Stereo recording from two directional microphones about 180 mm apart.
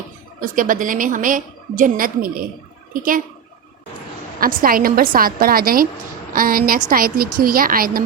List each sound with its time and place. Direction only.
0.3 s a woman's voice: 50° right (ahead or behind)
4.4 s a woman's voice: 55° right (ahead or behind)